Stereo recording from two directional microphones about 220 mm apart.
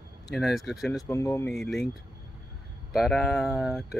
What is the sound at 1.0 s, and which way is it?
Speech, 10° left (ahead or behind).